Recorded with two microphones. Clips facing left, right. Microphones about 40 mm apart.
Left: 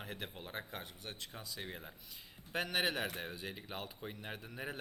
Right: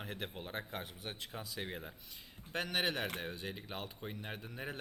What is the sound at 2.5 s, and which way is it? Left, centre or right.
A man's voice, centre.